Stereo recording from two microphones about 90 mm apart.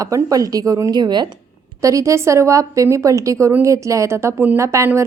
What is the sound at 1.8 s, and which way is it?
A woman's voice, 35° right (ahead or behind).